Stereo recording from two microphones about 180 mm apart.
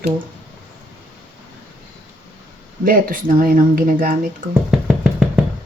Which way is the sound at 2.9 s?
50° right (ahead or behind).